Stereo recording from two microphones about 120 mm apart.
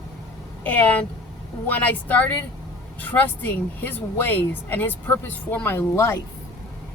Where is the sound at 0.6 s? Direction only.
15° left (ahead or behind).